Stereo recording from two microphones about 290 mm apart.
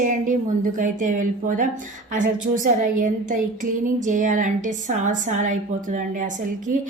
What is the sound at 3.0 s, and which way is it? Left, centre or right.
A woman's voice, right.